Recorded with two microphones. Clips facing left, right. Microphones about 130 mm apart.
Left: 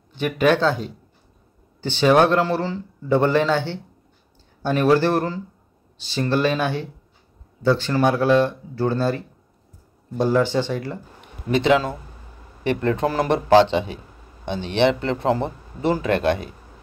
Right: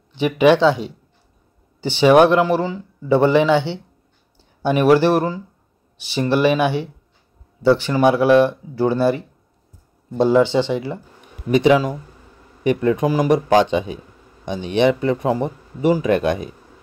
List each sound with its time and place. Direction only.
0.2 s speech: 10° right (ahead or behind)
4.9 s speech: 15° right (ahead or behind)